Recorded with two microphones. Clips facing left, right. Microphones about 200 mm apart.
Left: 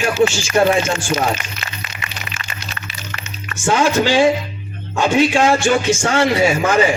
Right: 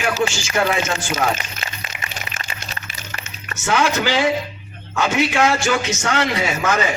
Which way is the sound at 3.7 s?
30° left (ahead or behind).